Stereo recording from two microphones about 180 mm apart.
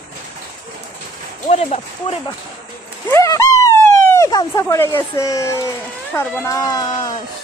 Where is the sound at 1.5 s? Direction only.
35° left (ahead or behind).